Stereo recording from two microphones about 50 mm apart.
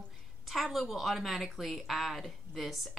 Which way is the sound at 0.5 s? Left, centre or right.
Centre.